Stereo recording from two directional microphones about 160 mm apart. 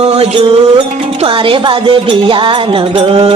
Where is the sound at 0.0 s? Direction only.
40° right (ahead or behind).